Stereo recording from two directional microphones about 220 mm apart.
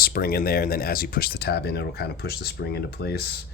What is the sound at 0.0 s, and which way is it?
Speech, 40° left (ahead or behind).